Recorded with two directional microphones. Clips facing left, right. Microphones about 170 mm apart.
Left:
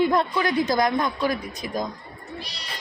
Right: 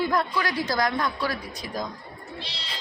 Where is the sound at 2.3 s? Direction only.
25° right (ahead or behind).